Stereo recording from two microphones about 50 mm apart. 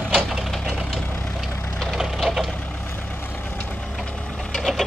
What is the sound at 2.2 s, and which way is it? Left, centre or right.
Vehicle, centre.